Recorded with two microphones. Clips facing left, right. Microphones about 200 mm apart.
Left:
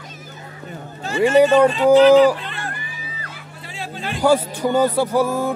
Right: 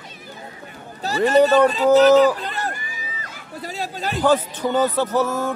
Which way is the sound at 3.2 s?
40° right (ahead or behind).